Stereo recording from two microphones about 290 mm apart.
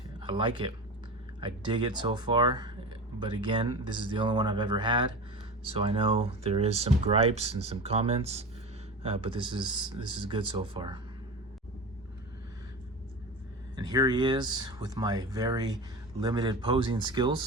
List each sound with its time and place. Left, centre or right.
0.2 s speech: centre
13.7 s speech: centre